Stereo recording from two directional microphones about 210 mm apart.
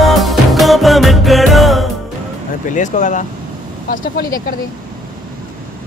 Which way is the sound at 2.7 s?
35° left (ahead or behind).